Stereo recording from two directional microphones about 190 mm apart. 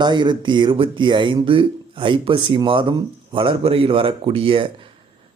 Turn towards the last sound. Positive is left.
turn(degrees=-25)  # may be behind; listen again after turning